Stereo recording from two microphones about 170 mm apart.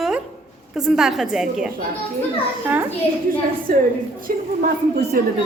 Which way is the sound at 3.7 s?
55° right (ahead or behind).